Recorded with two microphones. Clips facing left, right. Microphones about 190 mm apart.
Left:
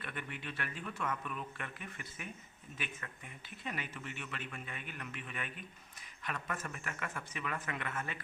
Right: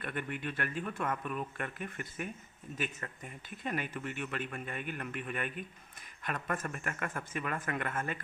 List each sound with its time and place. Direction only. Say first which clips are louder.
0.0 s speech: right 7 dB; 50° right (ahead or behind)